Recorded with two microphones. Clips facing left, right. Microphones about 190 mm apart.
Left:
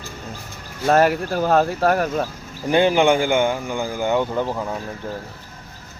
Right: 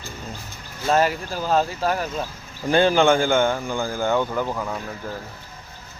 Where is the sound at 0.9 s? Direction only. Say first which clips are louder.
Left 4 dB; 60° left (ahead or behind).